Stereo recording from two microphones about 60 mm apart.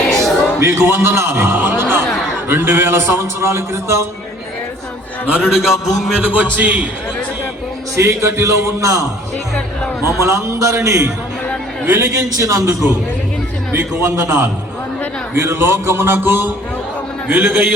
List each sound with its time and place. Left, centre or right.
0.6 s a man's voice: right
1.8 s a sound: right
2.5 s a man's voice: right
5.4 s a man's voice: centre
6.2 s a man's voice: right
7.9 s a man's voice: right
10.2 s a man's voice: right
12.3 s a man's voice: right
14.0 s a man's voice: right
16.1 s a sound: right
17.2 s a man's voice: right